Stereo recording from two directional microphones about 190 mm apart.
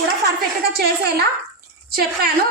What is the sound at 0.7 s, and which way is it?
Speech, 55° right (ahead or behind).